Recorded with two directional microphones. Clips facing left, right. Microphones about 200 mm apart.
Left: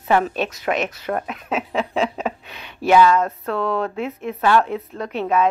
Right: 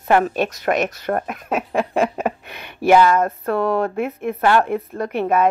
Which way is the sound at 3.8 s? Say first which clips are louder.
Right 3 dB; 50° right (ahead or behind).